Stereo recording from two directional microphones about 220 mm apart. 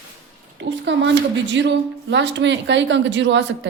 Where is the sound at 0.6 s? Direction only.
55° right (ahead or behind).